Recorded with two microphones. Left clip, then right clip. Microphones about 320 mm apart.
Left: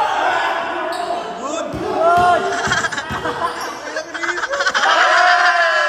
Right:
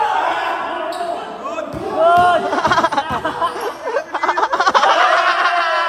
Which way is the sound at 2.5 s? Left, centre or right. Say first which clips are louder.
Right 4 dB; centre.